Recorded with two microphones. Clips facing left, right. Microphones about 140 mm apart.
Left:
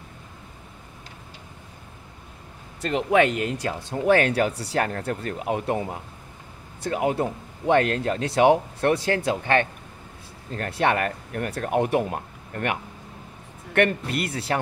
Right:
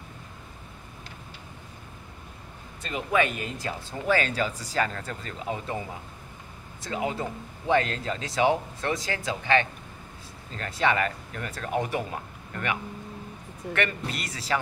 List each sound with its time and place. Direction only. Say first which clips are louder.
2.8 s speech: left 6 dB; 70° left (ahead or behind); by 12.7 s 55° left (ahead or behind)
13.7 s speech: left 8 dB; 55° left (ahead or behind)